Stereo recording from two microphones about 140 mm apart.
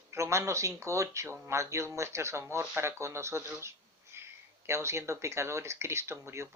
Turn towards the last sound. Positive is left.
turn(degrees=-20)  # may be behind; listen again after turning